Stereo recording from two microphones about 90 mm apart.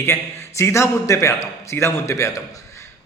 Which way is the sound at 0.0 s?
30° left (ahead or behind).